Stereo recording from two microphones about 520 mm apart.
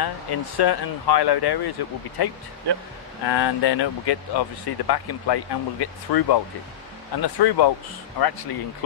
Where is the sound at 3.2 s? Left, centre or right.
Left.